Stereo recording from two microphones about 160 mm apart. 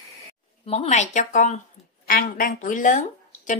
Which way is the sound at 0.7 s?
45° left (ahead or behind).